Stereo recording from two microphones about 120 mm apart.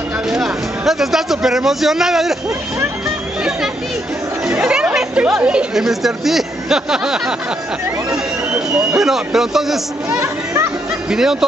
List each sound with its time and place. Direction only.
0.3 s a woman's voice: centre (ahead or behind)
4.5 s a woman's voice: 10° right (ahead or behind)
8.5 s speech: 5° right (ahead or behind)
10.2 s children playing: 25° right (ahead or behind)
11.1 s speech: 5° right (ahead or behind)